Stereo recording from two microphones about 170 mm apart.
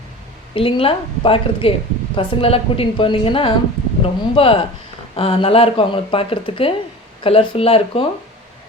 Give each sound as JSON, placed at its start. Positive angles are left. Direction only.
{"t": 0.5, "sound": "speech", "side_deg": 30}